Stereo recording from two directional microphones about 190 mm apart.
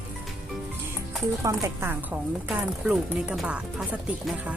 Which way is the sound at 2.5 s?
5° right (ahead or behind).